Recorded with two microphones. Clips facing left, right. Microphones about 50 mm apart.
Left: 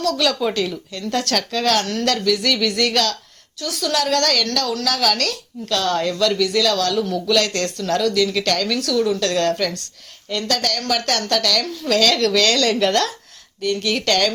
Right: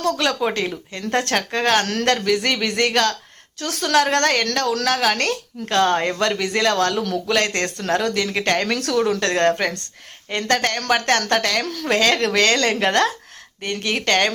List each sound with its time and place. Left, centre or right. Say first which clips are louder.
0.0 s a woman's voice: left 1 dB; right
1.8 s speech: right 1 dB; right
2.0 s speech: left 1 dB; right
3.6 s speech: right 3 dB; right
8.6 s speech: even; right
11.6 s a woman's voice: right 2 dB; right
11.9 s a woman's voice: left 1 dB; right
13.6 s speech: left 4 dB; right
13.9 s a woman's voice: right 2 dB; right